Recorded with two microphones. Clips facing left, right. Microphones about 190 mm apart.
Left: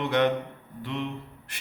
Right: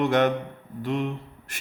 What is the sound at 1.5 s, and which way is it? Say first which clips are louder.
Music: right 8 dB; 45° right (ahead or behind).